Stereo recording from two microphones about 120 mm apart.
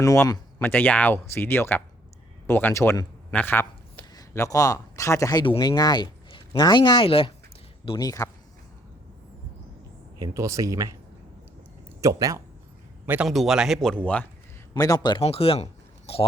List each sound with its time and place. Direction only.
0.0 s a man's voice: 25° left (ahead or behind)
0.6 s a man's voice: 15° left (ahead or behind)
4.1 s speech: 30° left (ahead or behind); by 7.3 s 50° left (ahead or behind)
7.9 s speech: 30° left (ahead or behind)
10.2 s speech: 30° right (ahead or behind)
11.9 s speech: 25° right (ahead or behind)
13.2 s a man's voice: centre (ahead or behind)
13.9 s speech: 10° left (ahead or behind)
14.7 s speech: 30° left (ahead or behind)
15.2 s speech: 55° left (ahead or behind)